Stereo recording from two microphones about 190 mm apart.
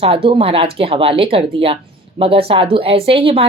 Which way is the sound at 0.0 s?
30° right (ahead or behind).